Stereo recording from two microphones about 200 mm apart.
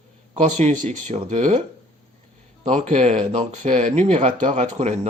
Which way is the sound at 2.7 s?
30° right (ahead or behind).